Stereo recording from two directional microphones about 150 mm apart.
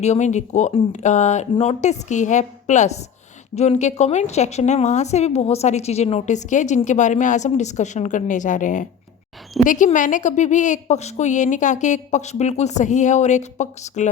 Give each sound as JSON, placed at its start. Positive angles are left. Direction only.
{"t": 0.0, "sound": "a woman's voice", "side_deg": 50}
{"t": 0.7, "sound": "speech", "side_deg": 40}
{"t": 1.0, "sound": "a woman's voice", "side_deg": 50}